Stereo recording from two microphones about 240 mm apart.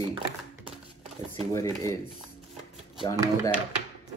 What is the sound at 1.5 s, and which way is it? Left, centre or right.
Speech, centre.